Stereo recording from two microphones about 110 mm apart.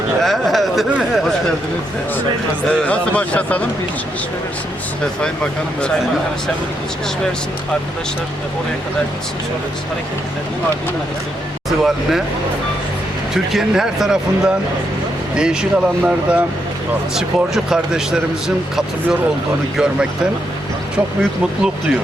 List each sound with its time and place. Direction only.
0.2 s speech: centre (ahead or behind)
2.6 s speech: 10° left (ahead or behind)
11.8 s speech: centre (ahead or behind)
13.3 s speech: 5° right (ahead or behind)
21.2 s speech: 5° right (ahead or behind)